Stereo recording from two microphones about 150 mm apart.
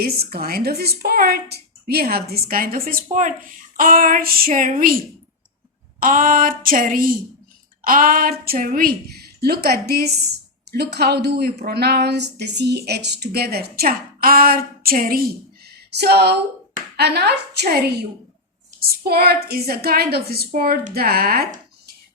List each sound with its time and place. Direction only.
0.2 s a woman's voice: 85° right; by 4.9 s 65° right (ahead or behind)
6.0 s a woman's voice: 65° right (ahead or behind)
15.6 s a sound: 90° right
17.0 s speech: 90° right
20.5 s speech: 65° right (ahead or behind)